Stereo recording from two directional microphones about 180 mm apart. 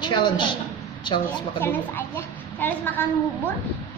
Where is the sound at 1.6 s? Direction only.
10° left (ahead or behind).